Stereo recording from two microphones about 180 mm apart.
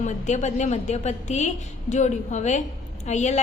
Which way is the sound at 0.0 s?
40° left (ahead or behind).